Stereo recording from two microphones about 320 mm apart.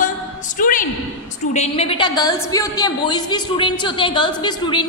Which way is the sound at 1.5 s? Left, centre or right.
Centre.